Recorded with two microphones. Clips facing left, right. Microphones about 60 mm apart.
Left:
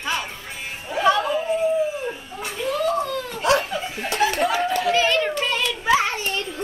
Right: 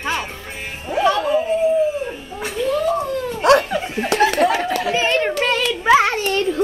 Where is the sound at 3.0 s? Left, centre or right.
Right.